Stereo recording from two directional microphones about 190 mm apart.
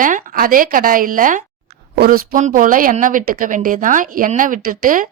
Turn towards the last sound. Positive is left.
turn(degrees=-45)  # may be behind; listen again after turning